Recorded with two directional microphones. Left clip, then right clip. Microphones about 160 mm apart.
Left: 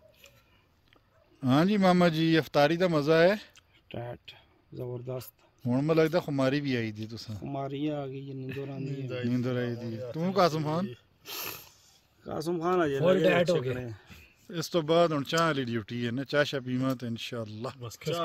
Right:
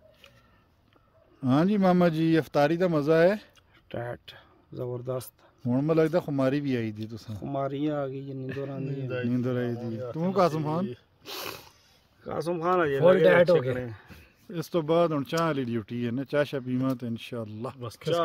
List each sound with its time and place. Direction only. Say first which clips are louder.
1.4 s speech: right 1 dB; centre (ahead or behind)
3.9 s speech: right 5 dB; 15° right (ahead or behind)
5.7 s speech: right 1 dB; 5° right (ahead or behind)
8.8 s a man's voice: right 2 dB; 70° right (ahead or behind)
9.3 s speech: right 1 dB; 5° right (ahead or behind)
10.9 s speech: right 3 dB; 55° right (ahead or behind)
12.2 s speech: right 2 dB; 60° left (ahead or behind)
13.0 s speech: right 7 dB; 15° right (ahead or behind)
13.7 s speech: right 4 dB; 60° left (ahead or behind)
14.0 s speech: right 2 dB; 5° right (ahead or behind)
17.7 s speech: right 7 dB; 40° right (ahead or behind)